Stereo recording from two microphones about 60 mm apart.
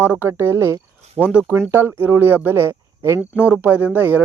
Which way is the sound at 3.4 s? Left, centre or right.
Right.